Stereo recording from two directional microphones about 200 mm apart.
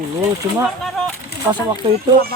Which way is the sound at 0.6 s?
Centre (ahead or behind).